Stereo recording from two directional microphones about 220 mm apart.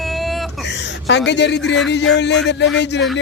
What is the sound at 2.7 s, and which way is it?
Speech, 50° left (ahead or behind).